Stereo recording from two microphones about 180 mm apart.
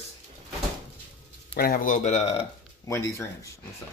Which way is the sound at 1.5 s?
60° left (ahead or behind).